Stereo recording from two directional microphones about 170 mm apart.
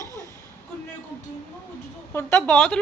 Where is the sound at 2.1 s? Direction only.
15° left (ahead or behind).